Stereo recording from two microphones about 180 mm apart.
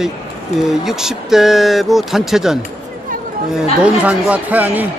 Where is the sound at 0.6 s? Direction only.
Centre (ahead or behind).